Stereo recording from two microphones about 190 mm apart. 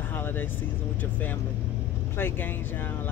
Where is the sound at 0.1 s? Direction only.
10° left (ahead or behind).